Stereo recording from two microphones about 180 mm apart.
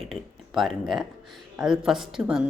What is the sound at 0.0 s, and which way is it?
Speech, centre (ahead or behind).